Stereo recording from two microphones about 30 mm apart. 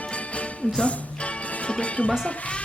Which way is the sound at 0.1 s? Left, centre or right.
Left.